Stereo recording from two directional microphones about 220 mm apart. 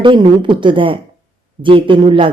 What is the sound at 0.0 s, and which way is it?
Speech, 20° right (ahead or behind).